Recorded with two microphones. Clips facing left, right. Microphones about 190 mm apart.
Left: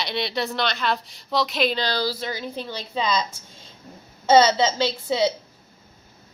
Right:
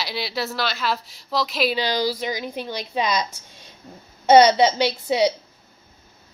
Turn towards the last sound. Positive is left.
turn(degrees=-15)  # may be behind; listen again after turning